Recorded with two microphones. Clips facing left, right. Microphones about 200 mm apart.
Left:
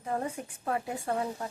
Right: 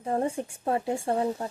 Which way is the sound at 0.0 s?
30° right (ahead or behind).